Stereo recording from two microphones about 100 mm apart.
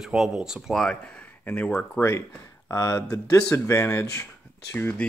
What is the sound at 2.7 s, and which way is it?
Speech, 30° left (ahead or behind).